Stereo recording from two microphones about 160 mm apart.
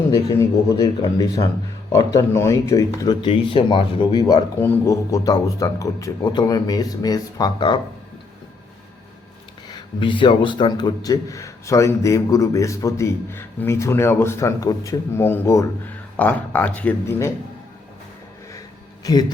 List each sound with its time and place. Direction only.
0.1 s a man's voice: 20° left (ahead or behind)
4.6 s a man's voice: 15° left (ahead or behind)
9.6 s a man's voice: 30° left (ahead or behind)